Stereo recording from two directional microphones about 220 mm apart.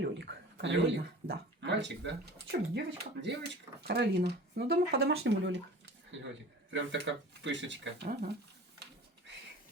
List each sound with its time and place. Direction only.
0.0 s a sound: 50° right (ahead or behind)
1.3 s speech: 50° right (ahead or behind)
6.7 s speech: 55° right (ahead or behind)
8.0 s speech: 40° right (ahead or behind)